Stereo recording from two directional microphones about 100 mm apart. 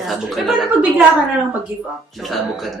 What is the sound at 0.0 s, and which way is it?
Speech, centre (ahead or behind).